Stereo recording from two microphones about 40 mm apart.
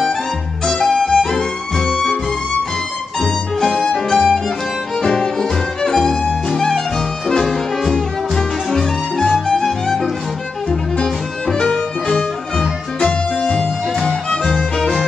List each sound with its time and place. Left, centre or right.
0.7 s music: centre
3.2 s music: centre
5.0 s violin: centre
5.4 s music: centre
7.2 s brass instrument: centre
8.4 s music: centre
11.4 s music: centre
14.8 s music: centre